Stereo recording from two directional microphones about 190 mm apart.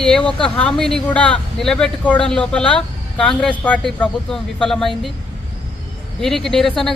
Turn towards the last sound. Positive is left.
turn(degrees=0)  # may be behind; listen again after turning